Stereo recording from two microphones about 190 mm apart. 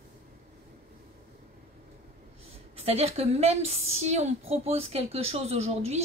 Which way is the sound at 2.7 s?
30° right (ahead or behind).